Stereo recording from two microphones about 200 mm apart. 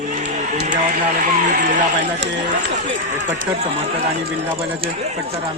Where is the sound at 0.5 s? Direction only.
35° right (ahead or behind).